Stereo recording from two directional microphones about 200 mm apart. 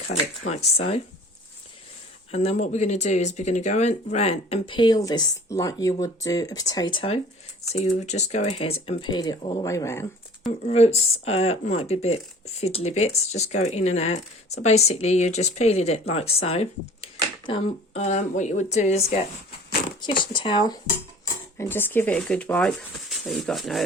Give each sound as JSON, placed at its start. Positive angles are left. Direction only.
{"t": 0.5, "sound": "speech", "side_deg": 30}
{"t": 2.3, "sound": "speech", "side_deg": 30}
{"t": 10.7, "sound": "speech", "side_deg": 30}
{"t": 20.2, "sound": "speech", "side_deg": 25}
{"t": 21.6, "sound": "speech", "side_deg": 10}